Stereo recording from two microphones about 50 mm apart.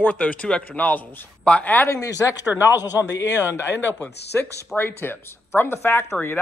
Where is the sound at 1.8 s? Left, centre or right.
Left.